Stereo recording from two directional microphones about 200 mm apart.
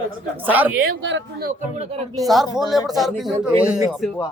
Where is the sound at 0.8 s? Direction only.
55° right (ahead or behind).